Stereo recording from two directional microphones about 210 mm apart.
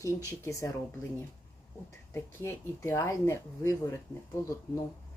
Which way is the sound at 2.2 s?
10° left (ahead or behind).